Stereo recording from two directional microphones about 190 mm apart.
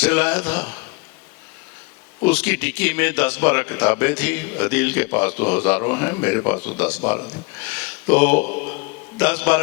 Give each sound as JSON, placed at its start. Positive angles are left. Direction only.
{"t": 0.0, "sound": "speech", "side_deg": 10}
{"t": 2.2, "sound": "speech", "side_deg": 10}